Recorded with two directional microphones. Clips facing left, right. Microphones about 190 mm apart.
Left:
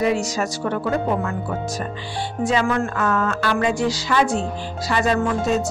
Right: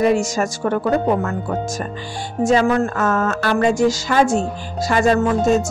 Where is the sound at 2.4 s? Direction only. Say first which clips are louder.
Right 5 dB; 40° right (ahead or behind).